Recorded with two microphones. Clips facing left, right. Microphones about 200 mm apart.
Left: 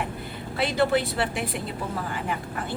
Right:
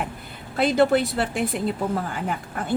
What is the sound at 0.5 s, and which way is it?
A woman's voice, 45° right (ahead or behind).